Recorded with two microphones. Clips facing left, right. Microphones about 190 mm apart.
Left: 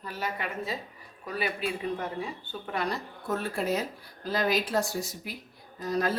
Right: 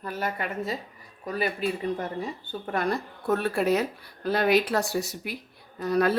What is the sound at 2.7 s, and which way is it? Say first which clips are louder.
Speech: right 4 dB; 50° right (ahead or behind).